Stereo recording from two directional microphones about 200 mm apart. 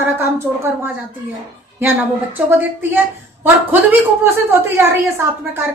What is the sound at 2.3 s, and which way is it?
A woman's voice, 10° right (ahead or behind).